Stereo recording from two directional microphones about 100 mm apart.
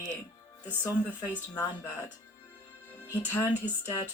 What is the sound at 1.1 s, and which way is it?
Speech, 15° left (ahead or behind).